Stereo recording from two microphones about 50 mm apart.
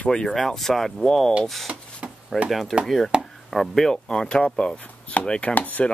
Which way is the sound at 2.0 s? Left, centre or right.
Right.